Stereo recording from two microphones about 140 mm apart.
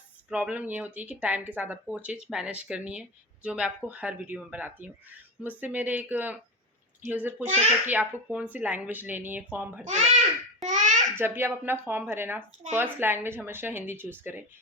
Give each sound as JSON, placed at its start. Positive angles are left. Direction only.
{"t": 0.3, "sound": "speech", "side_deg": -10}
{"t": 9.8, "sound": "a child's voice", "side_deg": -50}
{"t": 10.7, "sound": "babbling", "side_deg": -60}
{"t": 11.1, "sound": "speech", "side_deg": -15}